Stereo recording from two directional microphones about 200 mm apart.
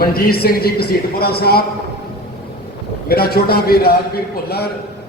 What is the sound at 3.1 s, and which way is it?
A man's voice, 50° left (ahead or behind).